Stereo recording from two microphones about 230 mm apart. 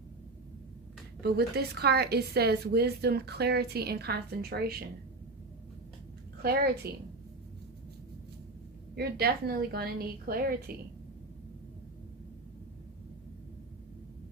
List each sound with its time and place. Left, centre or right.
1.2 s a woman's voice: right
6.8 s a woman's voice: right
9.0 s a woman's voice: right